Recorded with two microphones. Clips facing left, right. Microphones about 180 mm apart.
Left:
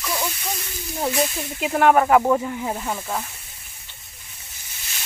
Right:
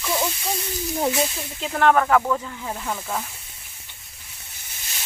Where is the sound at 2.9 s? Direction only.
Centre (ahead or behind).